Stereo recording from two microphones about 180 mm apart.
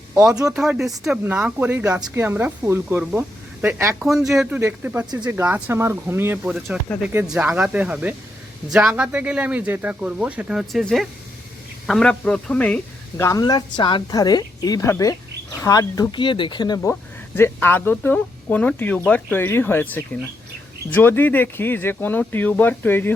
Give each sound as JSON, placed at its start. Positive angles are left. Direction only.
{"t": 0.5, "sound": "speech", "side_deg": -5}
{"t": 13.2, "sound": "speech", "side_deg": 20}